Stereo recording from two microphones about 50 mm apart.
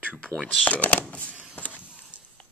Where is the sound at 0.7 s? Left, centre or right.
Left.